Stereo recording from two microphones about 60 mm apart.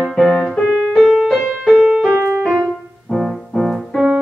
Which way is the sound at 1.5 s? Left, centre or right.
Centre.